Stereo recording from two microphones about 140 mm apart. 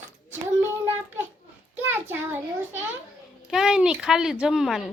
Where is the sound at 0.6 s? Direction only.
15° right (ahead or behind).